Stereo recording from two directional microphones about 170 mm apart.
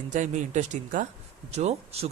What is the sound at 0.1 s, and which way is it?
Speech, 45° right (ahead or behind).